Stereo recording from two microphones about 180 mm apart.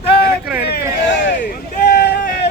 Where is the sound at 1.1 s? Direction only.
75° left (ahead or behind).